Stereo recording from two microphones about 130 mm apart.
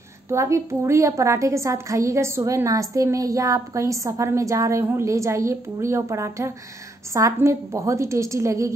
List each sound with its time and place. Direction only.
0.3 s a woman's voice: 20° right (ahead or behind)